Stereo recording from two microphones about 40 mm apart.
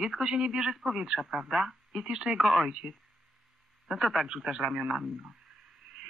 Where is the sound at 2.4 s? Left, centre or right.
Centre.